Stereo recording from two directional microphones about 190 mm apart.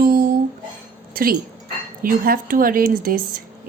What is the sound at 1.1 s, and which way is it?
Speech, 50° right (ahead or behind).